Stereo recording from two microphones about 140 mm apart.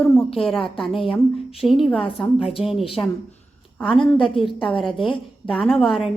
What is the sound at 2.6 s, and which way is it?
Speech, 45° left (ahead or behind).